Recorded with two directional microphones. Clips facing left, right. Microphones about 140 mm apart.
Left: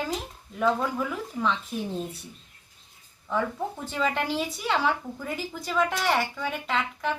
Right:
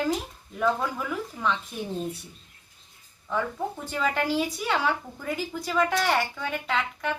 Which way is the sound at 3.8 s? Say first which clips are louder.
Right 1 dB; centre (ahead or behind).